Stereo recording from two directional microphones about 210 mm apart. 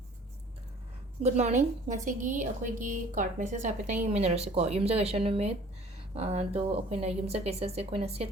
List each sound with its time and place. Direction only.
1.2 s a woman's voice: 30° right (ahead or behind)